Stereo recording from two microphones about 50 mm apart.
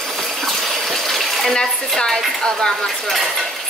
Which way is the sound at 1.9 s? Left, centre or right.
Centre.